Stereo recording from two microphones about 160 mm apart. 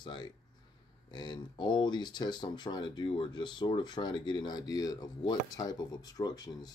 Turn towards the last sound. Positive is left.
turn(degrees=25)  # may be behind; listen again after turning